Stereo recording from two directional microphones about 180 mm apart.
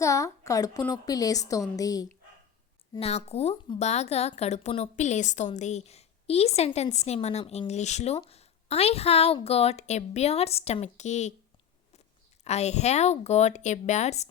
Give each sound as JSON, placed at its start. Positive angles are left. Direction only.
{"t": 0.0, "sound": "a woman's voice", "side_deg": 15}
{"t": 3.0, "sound": "a woman's voice", "side_deg": 35}
{"t": 12.5, "sound": "speech", "side_deg": 40}